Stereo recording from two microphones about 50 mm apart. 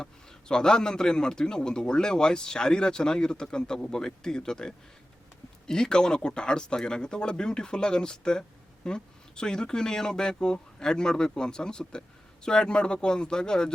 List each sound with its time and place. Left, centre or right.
0.0 s speech: centre